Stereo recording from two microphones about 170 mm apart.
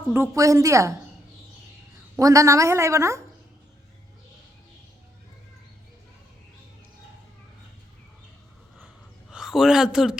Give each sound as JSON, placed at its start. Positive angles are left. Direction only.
{"t": 0.1, "sound": "a woman's voice", "side_deg": -15}
{"t": 2.1, "sound": "a woman's voice", "side_deg": -20}
{"t": 9.3, "sound": "speech", "side_deg": -5}